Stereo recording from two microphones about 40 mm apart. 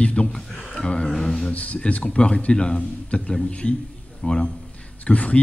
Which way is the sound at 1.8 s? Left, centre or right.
Left.